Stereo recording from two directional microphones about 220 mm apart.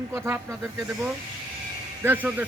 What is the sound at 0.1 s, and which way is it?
Speech, 10° right (ahead or behind).